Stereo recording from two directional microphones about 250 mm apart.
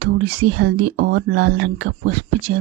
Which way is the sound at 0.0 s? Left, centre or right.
Right.